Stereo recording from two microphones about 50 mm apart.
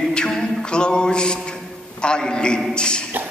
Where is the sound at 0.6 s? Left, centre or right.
Centre.